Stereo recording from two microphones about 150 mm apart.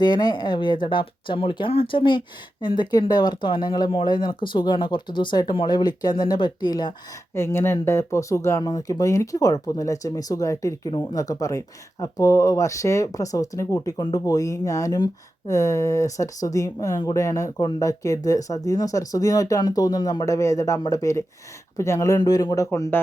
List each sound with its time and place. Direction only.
0.0 s speech: 30° left (ahead or behind)
7.3 s speech: 15° left (ahead or behind)